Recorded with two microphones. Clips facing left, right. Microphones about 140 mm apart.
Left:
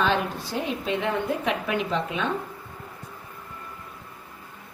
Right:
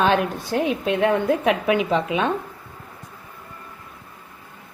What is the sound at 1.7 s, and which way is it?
Speech, 85° right.